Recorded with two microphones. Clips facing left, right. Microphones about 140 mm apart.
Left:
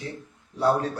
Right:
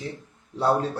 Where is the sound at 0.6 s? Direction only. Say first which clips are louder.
Even; 30° right (ahead or behind).